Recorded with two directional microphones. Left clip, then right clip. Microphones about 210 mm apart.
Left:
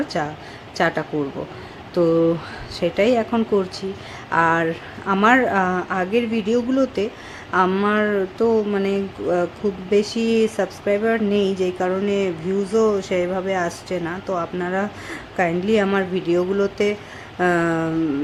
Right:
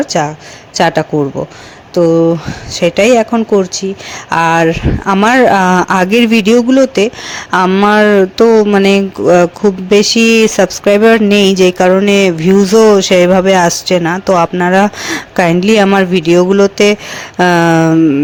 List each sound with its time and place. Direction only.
0.1 s speech: 35° right (ahead or behind)